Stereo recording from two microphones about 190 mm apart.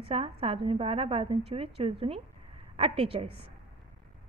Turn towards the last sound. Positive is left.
turn(degrees=-30)  # may be behind; listen again after turning